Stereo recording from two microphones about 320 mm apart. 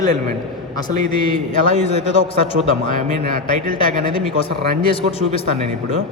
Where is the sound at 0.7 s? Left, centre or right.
Centre.